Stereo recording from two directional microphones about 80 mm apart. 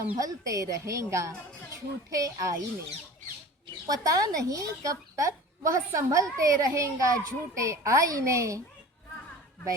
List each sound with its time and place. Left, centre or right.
0.2 s speech: right
3.8 s speech: right